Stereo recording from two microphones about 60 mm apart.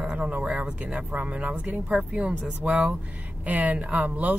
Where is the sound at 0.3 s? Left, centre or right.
Centre.